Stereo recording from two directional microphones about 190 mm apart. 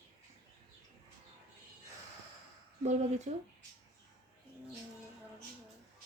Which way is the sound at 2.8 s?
35° right (ahead or behind).